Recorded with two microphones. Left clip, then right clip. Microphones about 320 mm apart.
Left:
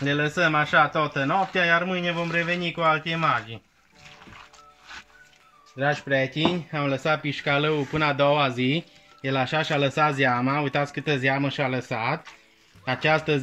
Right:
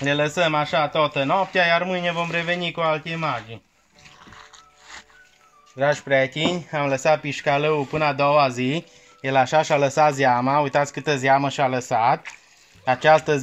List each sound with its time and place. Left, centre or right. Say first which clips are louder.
0.0 s speech: right 3 dB; centre
5.8 s speech: right 4 dB; centre